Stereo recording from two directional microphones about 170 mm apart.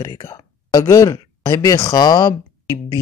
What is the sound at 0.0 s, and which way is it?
Speech, 20° left (ahead or behind).